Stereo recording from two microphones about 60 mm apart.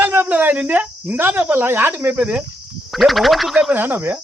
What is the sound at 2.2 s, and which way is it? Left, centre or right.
Speech, centre.